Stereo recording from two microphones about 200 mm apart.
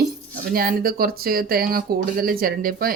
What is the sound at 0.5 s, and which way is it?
Speech, 45° right (ahead or behind).